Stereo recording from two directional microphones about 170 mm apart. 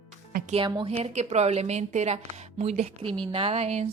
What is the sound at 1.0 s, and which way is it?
A woman's voice, 40° right (ahead or behind).